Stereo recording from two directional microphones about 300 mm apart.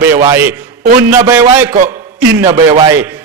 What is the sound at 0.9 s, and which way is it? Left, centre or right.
Speech, right.